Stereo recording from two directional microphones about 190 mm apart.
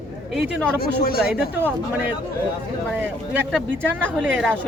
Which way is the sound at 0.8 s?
50° left (ahead or behind).